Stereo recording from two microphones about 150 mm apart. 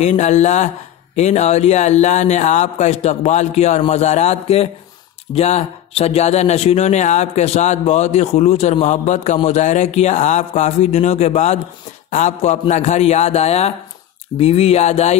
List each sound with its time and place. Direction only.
0.0 s speech: 50° left (ahead or behind)